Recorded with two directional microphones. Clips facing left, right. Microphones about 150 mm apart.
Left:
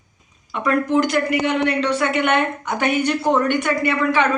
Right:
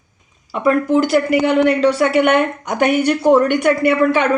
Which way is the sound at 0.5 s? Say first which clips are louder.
Right 4 dB; 30° right (ahead or behind).